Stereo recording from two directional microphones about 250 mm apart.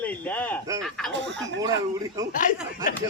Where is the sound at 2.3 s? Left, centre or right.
Left.